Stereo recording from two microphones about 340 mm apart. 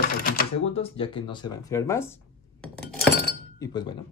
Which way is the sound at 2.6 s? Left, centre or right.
Centre.